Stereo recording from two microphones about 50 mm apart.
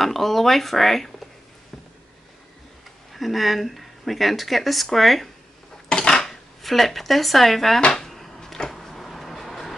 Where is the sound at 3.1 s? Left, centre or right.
Centre.